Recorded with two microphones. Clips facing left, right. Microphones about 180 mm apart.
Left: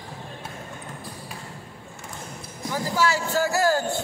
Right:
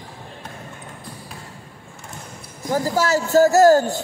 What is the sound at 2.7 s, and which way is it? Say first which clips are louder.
Speech: right 5 dB; 40° right (ahead or behind).